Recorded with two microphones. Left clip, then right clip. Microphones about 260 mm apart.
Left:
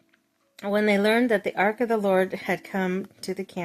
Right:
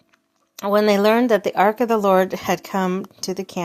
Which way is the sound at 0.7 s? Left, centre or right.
Centre.